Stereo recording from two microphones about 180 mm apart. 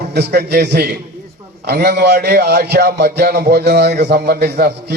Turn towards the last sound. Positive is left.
turn(degrees=-65)  # may be behind; listen again after turning